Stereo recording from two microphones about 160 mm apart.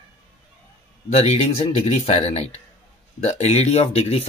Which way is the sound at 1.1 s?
40° left (ahead or behind).